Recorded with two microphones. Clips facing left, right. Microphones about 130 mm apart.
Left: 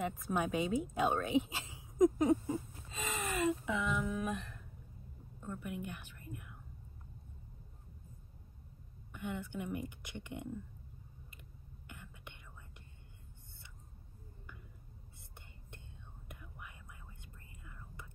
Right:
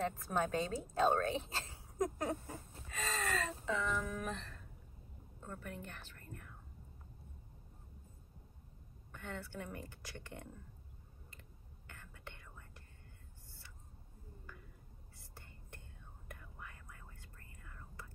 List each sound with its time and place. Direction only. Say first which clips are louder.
0.0 s a woman's voice: left 1 dB; 15° left (ahead or behind)
4.1 s a sound: left 4 dB; 15° left (ahead or behind)
5.4 s a woman's voice: left 5 dB; 15° left (ahead or behind)
9.1 s a woman's voice: left 5 dB; 15° left (ahead or behind)
11.9 s whispering: left 1 dB; 15° left (ahead or behind)
16.3 s whispering: even; 15° left (ahead or behind)